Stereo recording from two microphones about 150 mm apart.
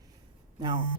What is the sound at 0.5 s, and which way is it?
Speech, 30° right (ahead or behind).